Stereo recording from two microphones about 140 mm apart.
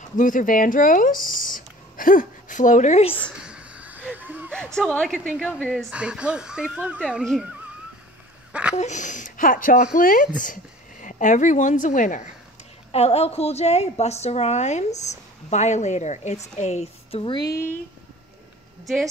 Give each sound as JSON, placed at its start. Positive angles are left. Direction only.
{"t": 0.2, "sound": "speech", "side_deg": 70}
{"t": 3.4, "sound": "wheeze", "side_deg": -10}
{"t": 4.7, "sound": "a woman's voice", "side_deg": 5}
{"t": 8.7, "sound": "speech", "side_deg": 60}
{"t": 12.9, "sound": "a woman's voice", "side_deg": 45}